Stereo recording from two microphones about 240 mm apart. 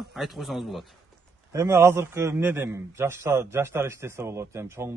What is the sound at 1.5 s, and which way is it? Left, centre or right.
A man's voice, centre.